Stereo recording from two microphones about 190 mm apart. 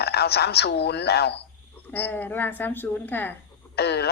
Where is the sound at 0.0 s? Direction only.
60° left (ahead or behind).